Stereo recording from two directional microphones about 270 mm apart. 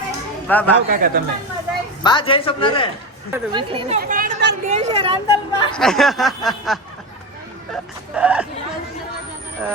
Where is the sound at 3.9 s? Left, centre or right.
Right.